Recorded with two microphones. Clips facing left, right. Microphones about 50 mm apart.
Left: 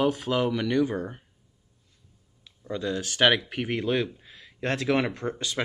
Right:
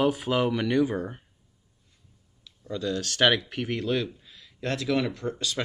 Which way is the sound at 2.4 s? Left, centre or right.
Left.